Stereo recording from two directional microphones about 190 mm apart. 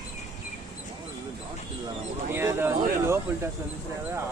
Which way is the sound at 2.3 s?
10° right (ahead or behind).